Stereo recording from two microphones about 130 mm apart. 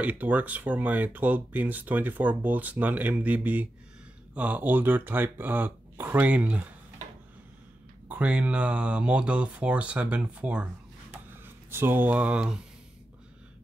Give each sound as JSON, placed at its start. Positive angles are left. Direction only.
{"t": 0.0, "sound": "speech", "side_deg": -10}
{"t": 8.1, "sound": "speech", "side_deg": -10}